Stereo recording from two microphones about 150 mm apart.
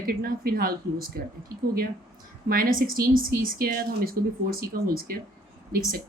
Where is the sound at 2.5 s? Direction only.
70° right (ahead or behind).